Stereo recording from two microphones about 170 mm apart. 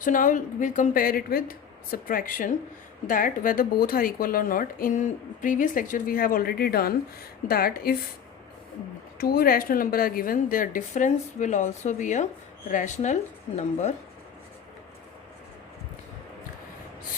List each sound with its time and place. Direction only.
0.0 s speech: 50° left (ahead or behind)
9.1 s a woman's voice: 60° left (ahead or behind); by 13.6 s 35° left (ahead or behind)